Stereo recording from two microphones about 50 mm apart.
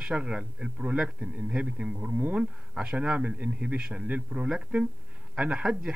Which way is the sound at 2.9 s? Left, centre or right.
Right.